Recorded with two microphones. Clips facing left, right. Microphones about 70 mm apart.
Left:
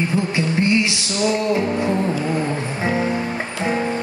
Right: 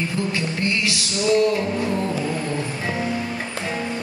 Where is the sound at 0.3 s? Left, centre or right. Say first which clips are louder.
Left 5 dB; left.